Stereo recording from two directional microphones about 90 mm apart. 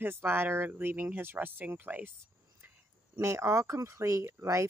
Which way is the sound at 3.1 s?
30° right (ahead or behind).